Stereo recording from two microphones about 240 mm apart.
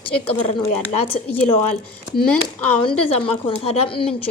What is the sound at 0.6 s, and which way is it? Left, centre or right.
Speech, left.